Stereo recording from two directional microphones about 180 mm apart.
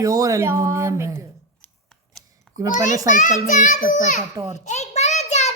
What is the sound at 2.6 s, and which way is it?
Speech, 20° right (ahead or behind).